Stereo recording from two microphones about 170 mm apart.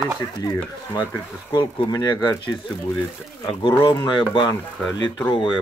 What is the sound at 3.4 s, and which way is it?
Speech, 30° left (ahead or behind).